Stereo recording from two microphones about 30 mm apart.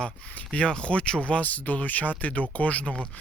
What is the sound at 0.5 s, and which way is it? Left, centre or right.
Speech, left.